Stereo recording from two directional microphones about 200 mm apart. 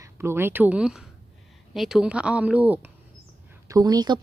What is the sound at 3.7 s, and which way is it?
Speech, 20° right (ahead or behind).